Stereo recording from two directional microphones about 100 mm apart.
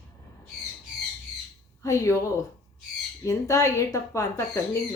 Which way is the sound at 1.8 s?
30° left (ahead or behind).